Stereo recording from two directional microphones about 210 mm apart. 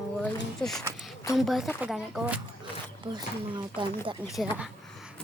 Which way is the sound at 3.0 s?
20° right (ahead or behind).